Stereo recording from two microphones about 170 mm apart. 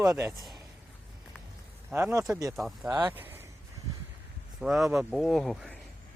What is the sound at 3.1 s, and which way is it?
Speech, 10° right (ahead or behind).